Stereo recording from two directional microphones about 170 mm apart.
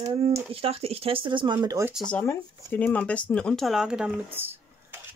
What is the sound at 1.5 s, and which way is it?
Speech, 15° right (ahead or behind).